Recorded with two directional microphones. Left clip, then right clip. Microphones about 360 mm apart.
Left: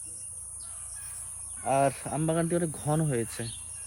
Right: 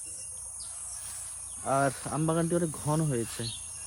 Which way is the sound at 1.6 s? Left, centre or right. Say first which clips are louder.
Left 2 dB; centre.